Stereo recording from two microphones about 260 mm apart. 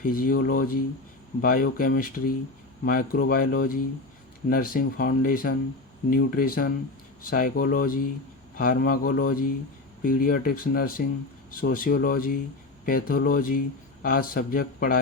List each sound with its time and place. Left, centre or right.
0.0 s speech: left